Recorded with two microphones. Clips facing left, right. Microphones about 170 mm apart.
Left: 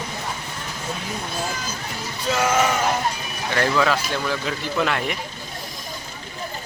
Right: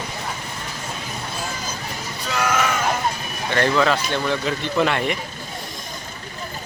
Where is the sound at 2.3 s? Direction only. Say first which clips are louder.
Left 1 dB; 20° left (ahead or behind).